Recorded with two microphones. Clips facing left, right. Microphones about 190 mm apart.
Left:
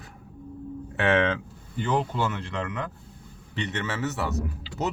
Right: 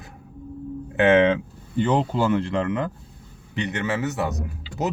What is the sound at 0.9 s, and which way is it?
A man's voice, 20° right (ahead or behind).